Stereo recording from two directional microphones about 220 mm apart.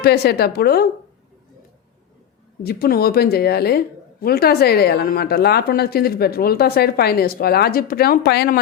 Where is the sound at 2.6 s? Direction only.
45° left (ahead or behind).